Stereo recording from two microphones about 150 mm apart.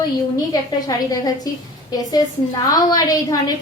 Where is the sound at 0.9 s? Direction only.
25° left (ahead or behind).